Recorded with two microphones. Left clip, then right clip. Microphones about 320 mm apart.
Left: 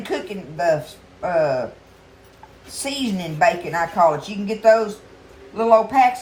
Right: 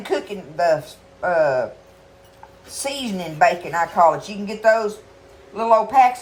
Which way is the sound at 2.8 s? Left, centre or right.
Centre.